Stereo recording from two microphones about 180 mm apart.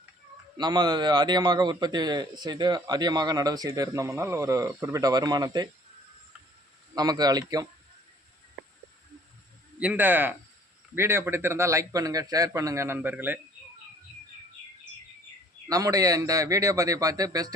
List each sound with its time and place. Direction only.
0.5 s a man's voice: 25° right (ahead or behind)
6.9 s a man's voice: 20° right (ahead or behind)
9.8 s speech: 10° right (ahead or behind)
15.7 s a man's voice: 20° right (ahead or behind)